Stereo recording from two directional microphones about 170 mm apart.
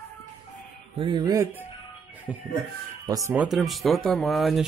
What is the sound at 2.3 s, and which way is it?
Music, 10° right (ahead or behind).